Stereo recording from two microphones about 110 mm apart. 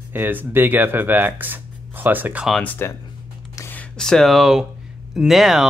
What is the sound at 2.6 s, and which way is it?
Speech, 15° left (ahead or behind).